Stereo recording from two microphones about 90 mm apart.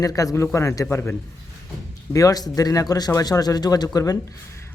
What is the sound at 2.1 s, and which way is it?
Speech, 40° left (ahead or behind).